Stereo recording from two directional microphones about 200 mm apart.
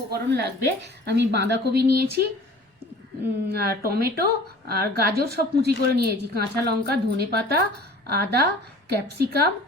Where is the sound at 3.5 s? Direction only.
50° right (ahead or behind).